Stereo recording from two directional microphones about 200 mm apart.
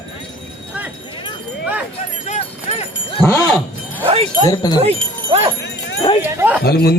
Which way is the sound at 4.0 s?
30° right (ahead or behind).